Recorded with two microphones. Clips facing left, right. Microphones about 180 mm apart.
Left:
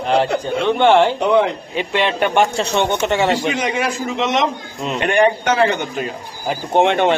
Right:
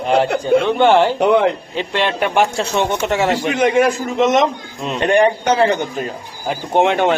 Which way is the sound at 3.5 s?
50° right (ahead or behind).